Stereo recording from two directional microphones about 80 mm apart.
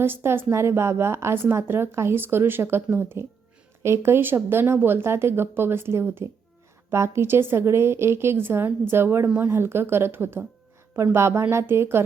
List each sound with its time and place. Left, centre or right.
0.0 s a woman's voice: right